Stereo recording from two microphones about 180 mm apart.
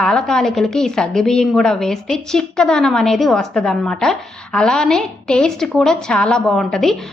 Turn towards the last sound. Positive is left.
turn(degrees=0)  # may be behind; listen again after turning